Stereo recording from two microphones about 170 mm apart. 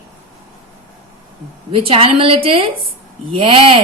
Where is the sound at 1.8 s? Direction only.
30° right (ahead or behind).